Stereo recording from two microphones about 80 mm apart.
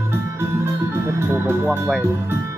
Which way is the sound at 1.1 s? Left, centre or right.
Right.